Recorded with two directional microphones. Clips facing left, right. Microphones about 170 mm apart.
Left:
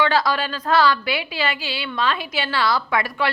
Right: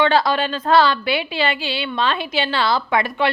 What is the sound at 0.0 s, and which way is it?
A woman's voice, 25° right (ahead or behind).